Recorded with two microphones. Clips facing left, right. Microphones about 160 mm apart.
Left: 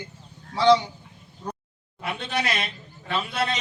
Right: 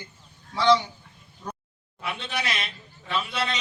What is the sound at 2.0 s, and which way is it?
Speech, 55° left (ahead or behind).